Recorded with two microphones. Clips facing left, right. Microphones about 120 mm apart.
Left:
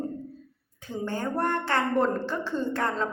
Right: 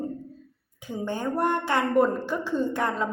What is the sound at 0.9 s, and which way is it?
A man's voice, 15° right (ahead or behind).